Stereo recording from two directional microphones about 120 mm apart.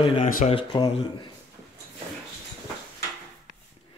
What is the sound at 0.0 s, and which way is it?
Speech, 50° left (ahead or behind).